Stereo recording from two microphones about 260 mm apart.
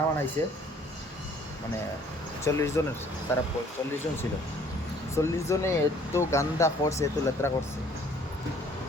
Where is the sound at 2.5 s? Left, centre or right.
Centre.